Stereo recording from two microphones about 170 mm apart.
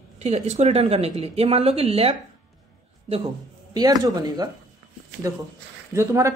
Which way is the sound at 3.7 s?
25° right (ahead or behind).